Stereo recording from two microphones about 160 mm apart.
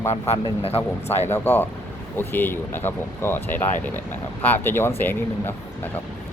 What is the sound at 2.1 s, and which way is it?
Speech, 15° left (ahead or behind).